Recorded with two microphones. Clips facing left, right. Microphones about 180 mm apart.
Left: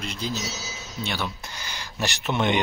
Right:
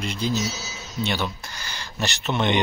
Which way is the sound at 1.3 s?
20° left (ahead or behind).